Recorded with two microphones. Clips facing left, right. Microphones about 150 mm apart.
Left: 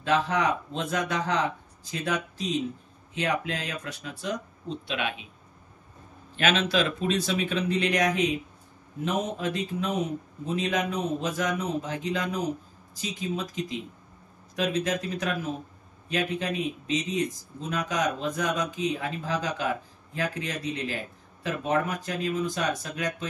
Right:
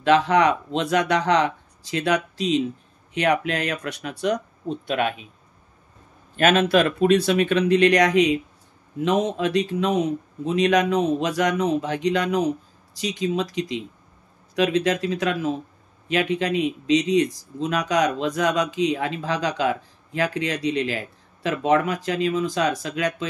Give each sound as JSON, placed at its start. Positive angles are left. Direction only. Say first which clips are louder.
{"t": 0.0, "sound": "speech", "louder": "right 7 dB", "side_deg": -80}
{"t": 3.2, "sound": "speech", "louder": "right 7 dB", "side_deg": -70}
{"t": 4.8, "sound": "speech", "louder": "right 8 dB", "side_deg": -45}
{"t": 6.3, "sound": "speech", "louder": "right 7 dB", "side_deg": -50}